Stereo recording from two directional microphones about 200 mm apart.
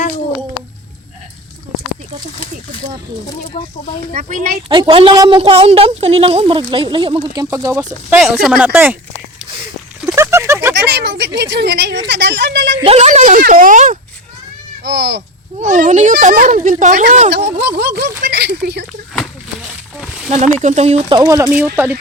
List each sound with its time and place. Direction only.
3.2 s speech: 25° left (ahead or behind)
4.1 s speech: 40° right (ahead or behind)
4.7 s speech: 25° right (ahead or behind)
8.1 s speech: 5° right (ahead or behind)
10.2 s a sound: 15° right (ahead or behind)
10.8 s a woman's voice: 60° right (ahead or behind)
12.8 s speech: 30° right (ahead or behind)
14.8 s a woman's voice: 60° right (ahead or behind)
15.6 s speech: 40° right (ahead or behind)
17.6 s a woman's voice: 55° right (ahead or behind)
20.0 s a sound: centre (ahead or behind)
20.3 s speech: 35° right (ahead or behind)
21.3 s speech: 10° right (ahead or behind)